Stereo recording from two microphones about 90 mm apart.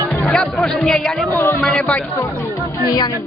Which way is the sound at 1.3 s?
25° left (ahead or behind).